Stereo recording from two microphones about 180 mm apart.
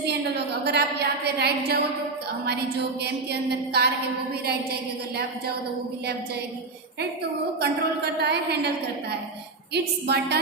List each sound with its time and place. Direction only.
0.0 s a woman's voice: 65° right (ahead or behind)
7.6 s a woman's voice: 65° right (ahead or behind)
9.7 s a woman's voice: 65° right (ahead or behind)